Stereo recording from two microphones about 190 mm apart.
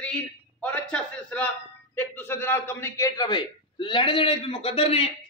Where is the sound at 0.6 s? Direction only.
5° left (ahead or behind).